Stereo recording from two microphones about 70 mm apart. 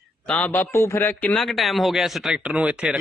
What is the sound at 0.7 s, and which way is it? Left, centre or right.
Speech, left.